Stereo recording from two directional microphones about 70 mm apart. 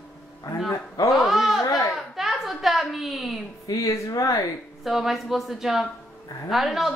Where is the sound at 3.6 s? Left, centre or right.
Left.